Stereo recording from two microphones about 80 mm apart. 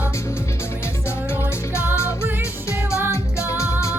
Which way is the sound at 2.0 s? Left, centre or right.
Right.